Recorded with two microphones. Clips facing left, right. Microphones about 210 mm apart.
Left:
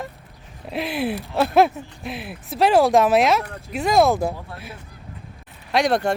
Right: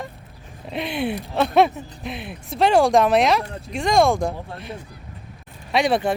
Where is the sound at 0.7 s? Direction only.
Centre (ahead or behind).